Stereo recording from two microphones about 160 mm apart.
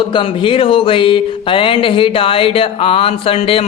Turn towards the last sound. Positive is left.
turn(degrees=35)  # may be behind; listen again after turning